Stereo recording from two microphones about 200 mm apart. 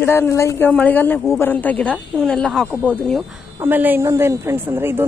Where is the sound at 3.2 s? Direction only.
10° right (ahead or behind).